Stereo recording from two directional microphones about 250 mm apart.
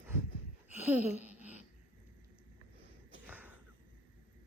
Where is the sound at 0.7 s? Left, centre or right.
Centre.